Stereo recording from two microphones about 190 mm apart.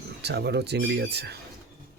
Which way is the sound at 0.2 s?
60° right (ahead or behind).